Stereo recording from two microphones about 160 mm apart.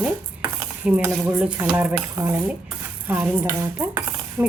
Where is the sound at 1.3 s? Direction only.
10° right (ahead or behind).